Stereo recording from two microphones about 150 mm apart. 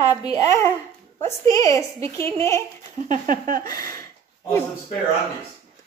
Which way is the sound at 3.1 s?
65° right (ahead or behind).